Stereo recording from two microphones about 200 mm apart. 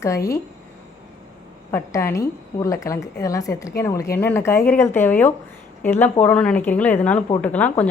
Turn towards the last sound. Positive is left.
turn(degrees=10)  # may be behind; listen again after turning